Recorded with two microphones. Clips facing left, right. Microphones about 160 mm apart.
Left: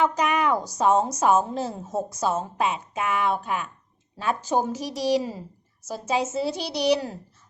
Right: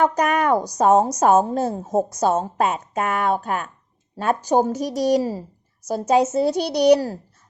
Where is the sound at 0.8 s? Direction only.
45° right (ahead or behind).